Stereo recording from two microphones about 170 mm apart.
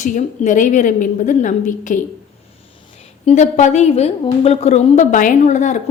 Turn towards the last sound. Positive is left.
turn(degrees=45)  # may be behind; listen again after turning